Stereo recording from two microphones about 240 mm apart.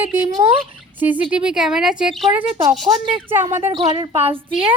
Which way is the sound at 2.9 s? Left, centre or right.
Centre.